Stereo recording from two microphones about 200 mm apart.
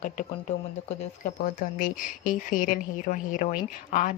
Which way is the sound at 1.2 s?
40° left (ahead or behind).